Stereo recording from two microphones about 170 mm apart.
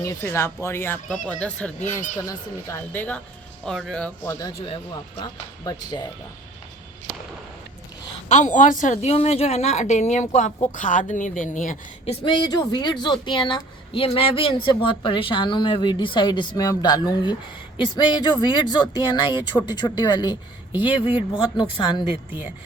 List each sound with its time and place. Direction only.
0.0 s speech: 15° left (ahead or behind)
1.0 s speech: 5° left (ahead or behind)
2.2 s speech: 20° left (ahead or behind)
4.6 s a woman's voice: 30° left (ahead or behind)
8.3 s a woman's voice: 45° left (ahead or behind)
12.2 s a woman's voice: 25° left (ahead or behind)
22.3 s speech: 10° right (ahead or behind)